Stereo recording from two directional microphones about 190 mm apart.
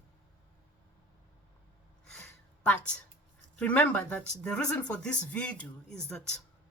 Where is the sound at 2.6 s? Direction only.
5° left (ahead or behind).